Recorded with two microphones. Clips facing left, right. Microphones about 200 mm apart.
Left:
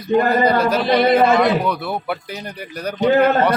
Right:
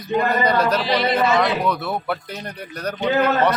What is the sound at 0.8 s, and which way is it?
Speech, 55° left (ahead or behind).